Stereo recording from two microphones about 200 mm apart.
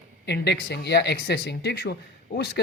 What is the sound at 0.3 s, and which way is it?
Speech, 55° left (ahead or behind).